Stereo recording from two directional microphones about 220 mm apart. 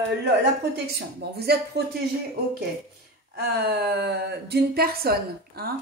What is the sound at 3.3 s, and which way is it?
Speech, 45° right (ahead or behind).